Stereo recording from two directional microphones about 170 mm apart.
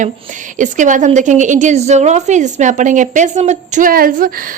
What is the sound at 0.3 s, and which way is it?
A woman's voice, 50° right (ahead or behind).